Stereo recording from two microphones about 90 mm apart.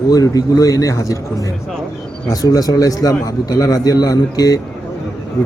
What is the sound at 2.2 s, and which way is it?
A man's voice, 45° left (ahead or behind).